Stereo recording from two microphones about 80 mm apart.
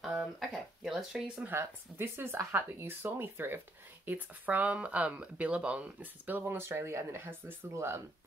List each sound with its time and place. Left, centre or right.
0.4 s speech: centre
1.4 s speech: right